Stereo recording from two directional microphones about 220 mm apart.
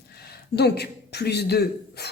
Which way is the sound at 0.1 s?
45° left (ahead or behind).